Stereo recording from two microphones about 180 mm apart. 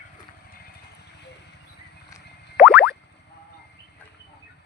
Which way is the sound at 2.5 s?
5° right (ahead or behind).